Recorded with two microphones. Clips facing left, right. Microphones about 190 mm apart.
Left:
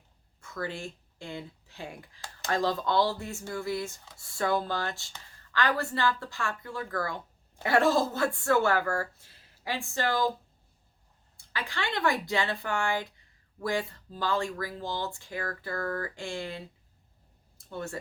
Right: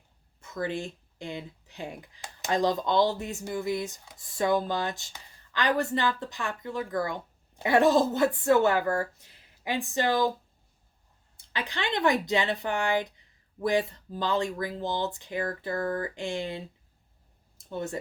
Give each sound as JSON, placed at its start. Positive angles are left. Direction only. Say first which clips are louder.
{"t": 0.4, "sound": "speech", "louder": "right 4 dB", "side_deg": -20}
{"t": 11.3, "sound": "speech", "louder": "right 2 dB", "side_deg": -20}